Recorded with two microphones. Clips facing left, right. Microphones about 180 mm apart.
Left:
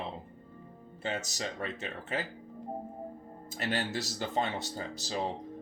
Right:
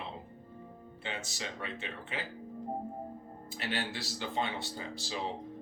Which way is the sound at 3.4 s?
45° left (ahead or behind).